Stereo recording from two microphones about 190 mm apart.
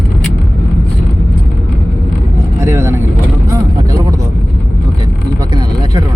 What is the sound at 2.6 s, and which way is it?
Vehicle, 15° right (ahead or behind).